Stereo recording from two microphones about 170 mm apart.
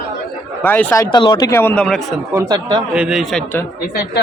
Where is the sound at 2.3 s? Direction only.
20° right (ahead or behind).